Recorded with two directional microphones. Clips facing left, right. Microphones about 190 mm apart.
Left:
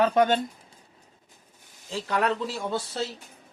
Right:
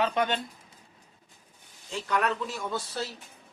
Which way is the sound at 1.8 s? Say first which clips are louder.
Left 2 dB; 35° left (ahead or behind).